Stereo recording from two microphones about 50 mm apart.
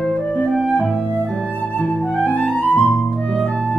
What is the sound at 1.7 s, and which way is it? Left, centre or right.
Music, left.